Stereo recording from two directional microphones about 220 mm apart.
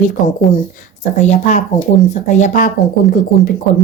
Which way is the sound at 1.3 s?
30° left (ahead or behind).